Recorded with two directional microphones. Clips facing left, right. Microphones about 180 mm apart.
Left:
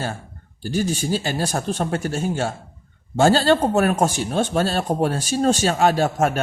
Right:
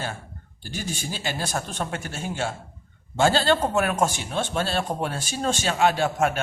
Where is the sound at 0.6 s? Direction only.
40° left (ahead or behind).